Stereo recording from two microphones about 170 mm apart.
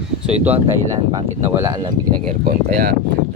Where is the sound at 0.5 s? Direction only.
35° right (ahead or behind).